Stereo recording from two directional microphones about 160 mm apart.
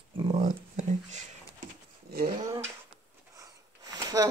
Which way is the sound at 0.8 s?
50° right (ahead or behind).